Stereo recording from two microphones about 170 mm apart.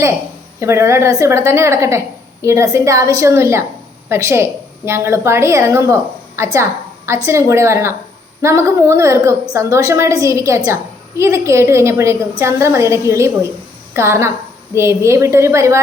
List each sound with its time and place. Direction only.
0.6 s a woman's voice: 15° right (ahead or behind)